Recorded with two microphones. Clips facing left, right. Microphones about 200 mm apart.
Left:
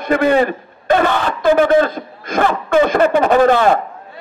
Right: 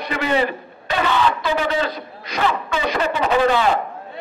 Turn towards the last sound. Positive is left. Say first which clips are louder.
# left 5 dB
turn(degrees=50)  # may be behind; listen again after turning